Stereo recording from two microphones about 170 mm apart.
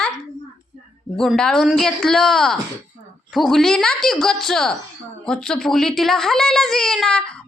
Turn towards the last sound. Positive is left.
turn(degrees=5)  # may be behind; listen again after turning